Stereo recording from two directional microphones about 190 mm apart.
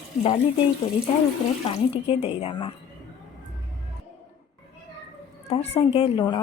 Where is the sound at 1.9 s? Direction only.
30° left (ahead or behind).